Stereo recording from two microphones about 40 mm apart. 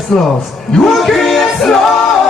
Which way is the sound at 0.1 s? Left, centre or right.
Centre.